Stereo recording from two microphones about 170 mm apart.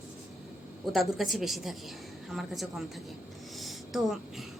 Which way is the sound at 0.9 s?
Centre (ahead or behind).